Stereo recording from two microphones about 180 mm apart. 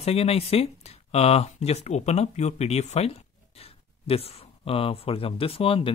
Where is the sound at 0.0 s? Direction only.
35° left (ahead or behind).